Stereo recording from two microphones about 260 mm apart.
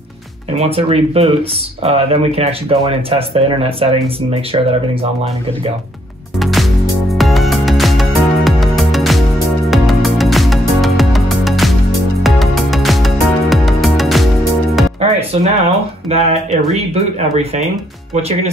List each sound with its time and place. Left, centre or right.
0.6 s speech: right
6.4 s music: centre
15.0 s music: right
16.1 s speech: right